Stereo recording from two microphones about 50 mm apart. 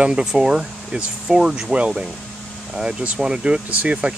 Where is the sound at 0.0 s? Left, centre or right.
Centre.